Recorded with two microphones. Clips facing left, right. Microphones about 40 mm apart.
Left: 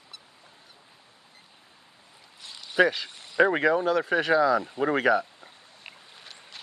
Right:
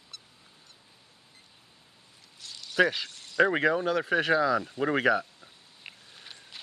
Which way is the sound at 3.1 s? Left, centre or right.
Centre.